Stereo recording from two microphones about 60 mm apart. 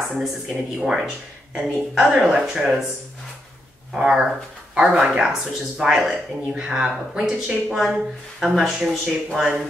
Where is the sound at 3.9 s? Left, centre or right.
Centre.